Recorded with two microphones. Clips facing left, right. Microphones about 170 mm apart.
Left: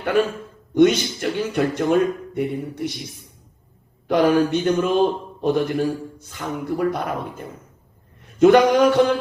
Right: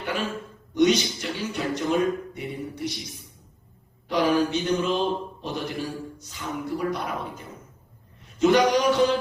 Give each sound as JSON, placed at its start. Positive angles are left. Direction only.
{"t": 0.7, "sound": "a man's voice", "side_deg": 55}
{"t": 4.1, "sound": "a man's voice", "side_deg": 50}